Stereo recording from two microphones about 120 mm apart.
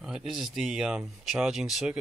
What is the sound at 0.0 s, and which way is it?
Speech, 5° right (ahead or behind).